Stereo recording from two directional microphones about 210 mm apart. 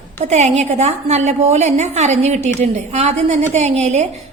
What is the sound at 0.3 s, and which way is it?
A woman's voice, 30° right (ahead or behind).